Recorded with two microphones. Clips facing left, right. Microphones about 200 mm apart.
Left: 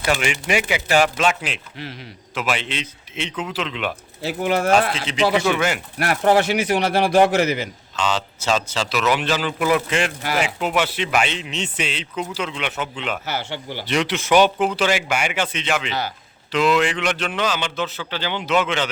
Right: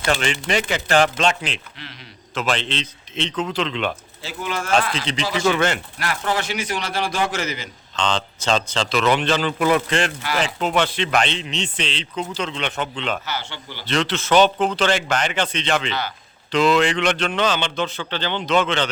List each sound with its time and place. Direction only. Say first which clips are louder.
0.0 s speech: even; 10° left (ahead or behind)
4.2 s a man's voice: left 8 dB; 60° left (ahead or behind)
5.1 s a man's voice: left 2 dB; 5° left (ahead or behind)
6.0 s a man's voice: left 10 dB; 60° left (ahead or behind)
7.9 s speech: even; 5° left (ahead or behind)